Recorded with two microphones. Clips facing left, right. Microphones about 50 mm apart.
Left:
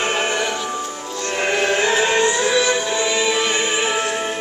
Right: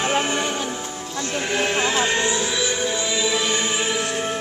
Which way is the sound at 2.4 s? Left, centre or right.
Left.